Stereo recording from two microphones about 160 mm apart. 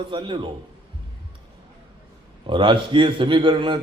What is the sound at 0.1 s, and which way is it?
Speech, 30° right (ahead or behind).